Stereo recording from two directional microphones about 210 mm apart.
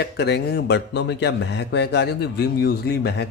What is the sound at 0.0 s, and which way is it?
Speech, 50° left (ahead or behind).